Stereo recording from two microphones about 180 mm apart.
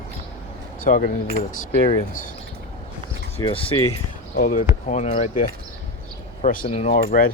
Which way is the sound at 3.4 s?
30° left (ahead or behind).